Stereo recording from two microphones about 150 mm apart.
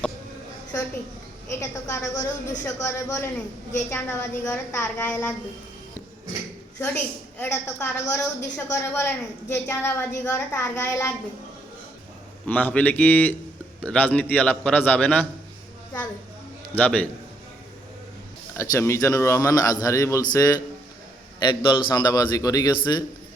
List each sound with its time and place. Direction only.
1.5 s a man's voice: 20° left (ahead or behind)
6.7 s a woman's voice: 15° left (ahead or behind)
12.5 s a woman's voice: 10° left (ahead or behind)
16.7 s a woman's voice: 10° left (ahead or behind)
18.5 s a man's voice: 20° left (ahead or behind)